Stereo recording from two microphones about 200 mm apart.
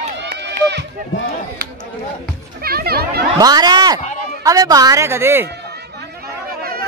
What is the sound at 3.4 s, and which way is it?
A woman's voice, 20° right (ahead or behind).